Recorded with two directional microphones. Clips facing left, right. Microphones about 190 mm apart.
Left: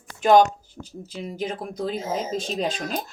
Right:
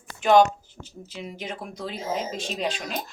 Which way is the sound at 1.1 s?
40° left (ahead or behind).